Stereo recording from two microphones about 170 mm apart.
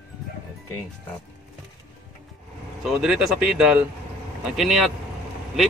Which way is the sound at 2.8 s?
5° right (ahead or behind).